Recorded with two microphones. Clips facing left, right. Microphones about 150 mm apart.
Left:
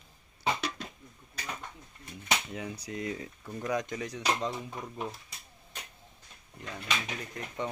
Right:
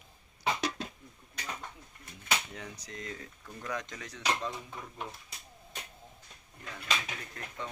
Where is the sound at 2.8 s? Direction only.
10° left (ahead or behind).